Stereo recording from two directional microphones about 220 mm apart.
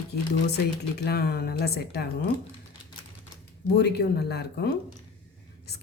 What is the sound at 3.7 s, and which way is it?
Speech, 50° left (ahead or behind).